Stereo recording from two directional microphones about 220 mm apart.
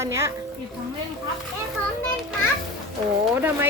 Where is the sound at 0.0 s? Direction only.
10° right (ahead or behind).